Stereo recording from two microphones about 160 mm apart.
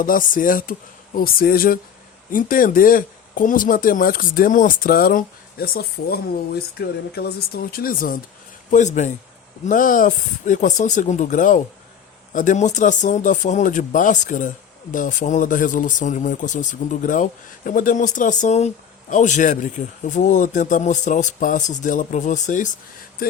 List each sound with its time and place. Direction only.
0.0 s speech: 60° left (ahead or behind)
8.7 s speech: 50° left (ahead or behind)